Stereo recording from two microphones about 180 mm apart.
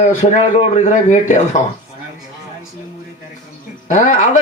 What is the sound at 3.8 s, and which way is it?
Speech, 40° left (ahead or behind).